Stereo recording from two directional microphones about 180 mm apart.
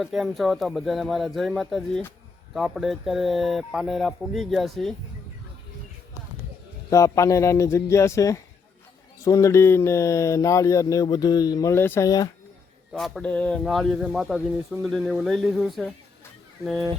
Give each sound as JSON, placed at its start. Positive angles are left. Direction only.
{"t": 0.0, "sound": "speech", "side_deg": 0}
{"t": 6.9, "sound": "speech", "side_deg": 15}
{"t": 12.9, "sound": "speech", "side_deg": 0}